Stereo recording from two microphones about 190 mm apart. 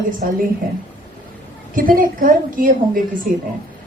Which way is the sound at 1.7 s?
45° right (ahead or behind).